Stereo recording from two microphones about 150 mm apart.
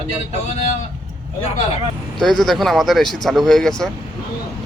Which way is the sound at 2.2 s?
Centre (ahead or behind).